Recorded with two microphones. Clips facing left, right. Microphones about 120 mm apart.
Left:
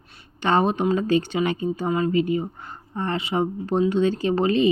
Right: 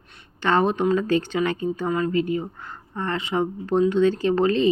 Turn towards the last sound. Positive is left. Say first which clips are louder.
# even
turn(degrees=15)  # may be behind; listen again after turning